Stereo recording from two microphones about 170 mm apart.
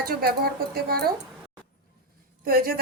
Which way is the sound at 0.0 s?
65° right (ahead or behind).